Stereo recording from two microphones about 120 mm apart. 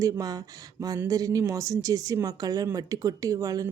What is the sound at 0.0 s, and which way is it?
A woman's voice, 30° right (ahead or behind).